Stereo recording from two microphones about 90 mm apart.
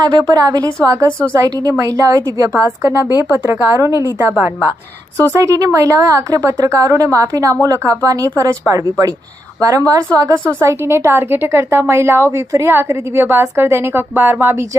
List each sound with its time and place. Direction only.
0.0 s a woman's voice: 50° right (ahead or behind)
0.9 s a woman's voice: 35° right (ahead or behind)
5.3 s a woman's voice: 35° right (ahead or behind)
10.6 s a woman's voice: 30° right (ahead or behind)